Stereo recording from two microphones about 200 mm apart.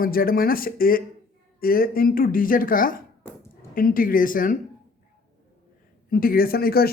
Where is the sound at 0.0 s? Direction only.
45° left (ahead or behind).